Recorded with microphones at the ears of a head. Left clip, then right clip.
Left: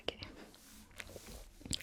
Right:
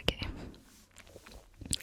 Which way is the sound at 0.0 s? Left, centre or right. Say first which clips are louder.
Right 8 dB; right.